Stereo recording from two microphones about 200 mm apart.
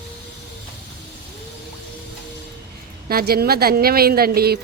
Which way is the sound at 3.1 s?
50° right (ahead or behind).